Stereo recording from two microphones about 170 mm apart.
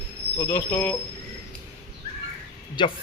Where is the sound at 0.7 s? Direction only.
10° left (ahead or behind).